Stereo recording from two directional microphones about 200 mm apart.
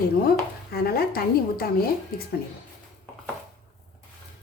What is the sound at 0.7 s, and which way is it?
Speech, 50° left (ahead or behind).